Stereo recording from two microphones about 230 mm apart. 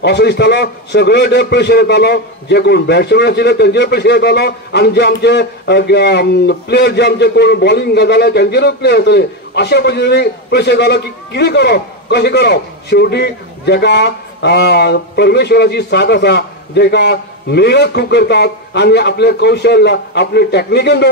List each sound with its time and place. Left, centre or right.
0.0 s a man's voice: left